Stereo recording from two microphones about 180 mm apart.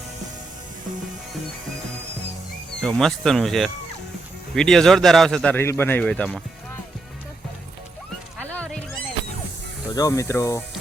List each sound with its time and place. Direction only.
2.8 s a man's voice: 5° left (ahead or behind)
8.4 s music: 5° left (ahead or behind)
9.9 s speech: 20° left (ahead or behind)